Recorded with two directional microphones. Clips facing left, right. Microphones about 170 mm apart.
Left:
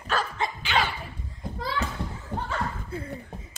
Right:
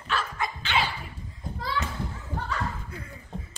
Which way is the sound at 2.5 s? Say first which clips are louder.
Left 1 dB; 30° left (ahead or behind).